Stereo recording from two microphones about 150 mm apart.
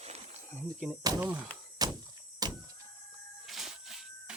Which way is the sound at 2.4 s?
25° right (ahead or behind).